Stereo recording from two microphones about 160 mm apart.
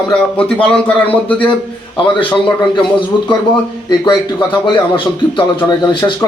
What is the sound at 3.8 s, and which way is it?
Speech, 30° left (ahead or behind).